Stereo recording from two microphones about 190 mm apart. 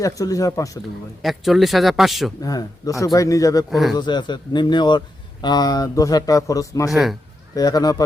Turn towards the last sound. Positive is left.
turn(degrees=20)  # may be behind; listen again after turning